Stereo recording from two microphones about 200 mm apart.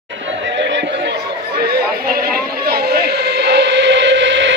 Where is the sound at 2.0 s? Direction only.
50° right (ahead or behind).